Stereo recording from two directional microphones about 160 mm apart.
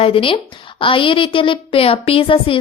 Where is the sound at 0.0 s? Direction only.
35° left (ahead or behind).